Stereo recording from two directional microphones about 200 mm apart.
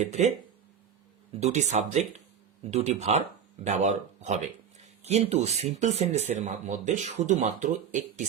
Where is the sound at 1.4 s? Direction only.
35° right (ahead or behind).